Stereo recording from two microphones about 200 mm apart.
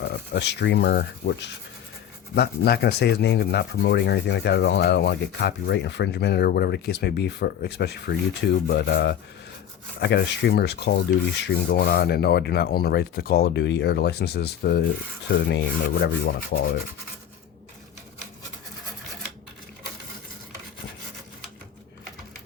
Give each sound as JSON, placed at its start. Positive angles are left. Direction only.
{"t": 0.0, "sound": "speech", "side_deg": 60}
{"t": 2.3, "sound": "rub", "side_deg": 55}
{"t": 11.4, "sound": "speech", "side_deg": 50}
{"t": 15.3, "sound": "rub", "side_deg": 60}